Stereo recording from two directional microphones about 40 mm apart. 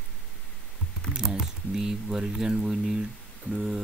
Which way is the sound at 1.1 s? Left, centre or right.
Centre.